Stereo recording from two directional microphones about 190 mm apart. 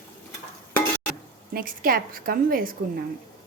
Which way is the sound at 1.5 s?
50° right (ahead or behind).